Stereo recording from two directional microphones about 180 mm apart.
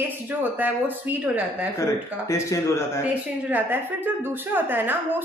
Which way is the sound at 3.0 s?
10° right (ahead or behind).